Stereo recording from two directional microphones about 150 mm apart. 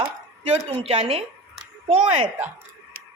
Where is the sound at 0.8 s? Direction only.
40° right (ahead or behind).